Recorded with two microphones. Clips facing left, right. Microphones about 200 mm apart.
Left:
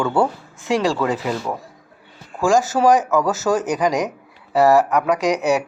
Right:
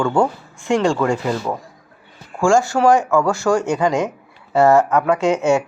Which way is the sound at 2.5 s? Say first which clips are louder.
Right 1 dB; 15° left (ahead or behind).